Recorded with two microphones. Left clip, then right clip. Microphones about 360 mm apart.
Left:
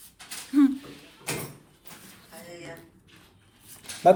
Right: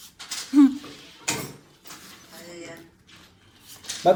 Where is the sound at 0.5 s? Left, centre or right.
Centre.